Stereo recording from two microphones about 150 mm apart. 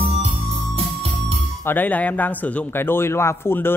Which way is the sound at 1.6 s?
10° left (ahead or behind).